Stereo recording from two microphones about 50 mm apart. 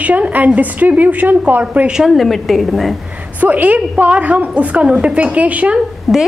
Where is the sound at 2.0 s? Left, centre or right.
Centre.